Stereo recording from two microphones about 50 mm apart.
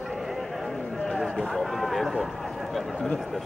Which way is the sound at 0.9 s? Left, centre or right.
Centre.